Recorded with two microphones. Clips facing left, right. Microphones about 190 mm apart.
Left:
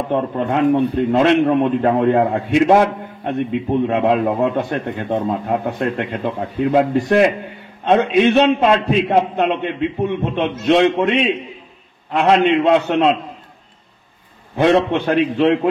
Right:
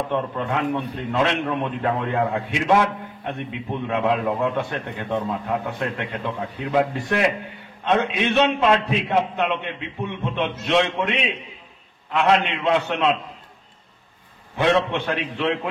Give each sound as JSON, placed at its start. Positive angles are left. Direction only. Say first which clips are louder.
{"t": 0.1, "sound": "a man's voice", "louder": "left 6 dB", "side_deg": 40}
{"t": 14.6, "sound": "a man's voice", "louder": "left 6 dB", "side_deg": 40}